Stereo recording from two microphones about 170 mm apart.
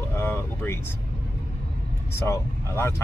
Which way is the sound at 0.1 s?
15° left (ahead or behind).